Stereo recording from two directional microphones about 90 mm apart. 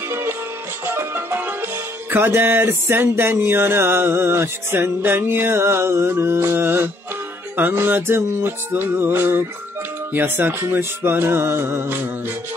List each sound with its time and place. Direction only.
0.1 s music: 25° right (ahead or behind)